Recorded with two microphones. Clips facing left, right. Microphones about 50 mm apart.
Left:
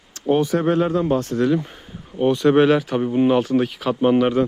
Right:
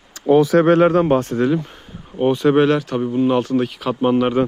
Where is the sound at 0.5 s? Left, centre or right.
Right.